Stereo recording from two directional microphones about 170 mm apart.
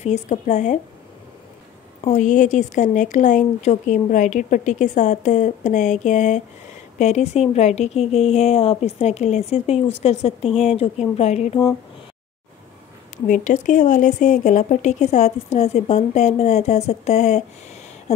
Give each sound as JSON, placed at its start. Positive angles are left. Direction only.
{"t": 0.0, "sound": "speech", "side_deg": 40}
{"t": 2.0, "sound": "speech", "side_deg": 45}
{"t": 13.3, "sound": "speech", "side_deg": 50}